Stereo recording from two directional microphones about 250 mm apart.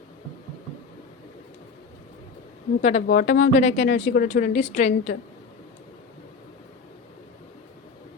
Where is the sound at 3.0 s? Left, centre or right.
Left.